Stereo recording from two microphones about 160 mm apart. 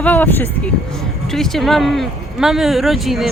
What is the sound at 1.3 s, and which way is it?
Speech, centre (ahead or behind).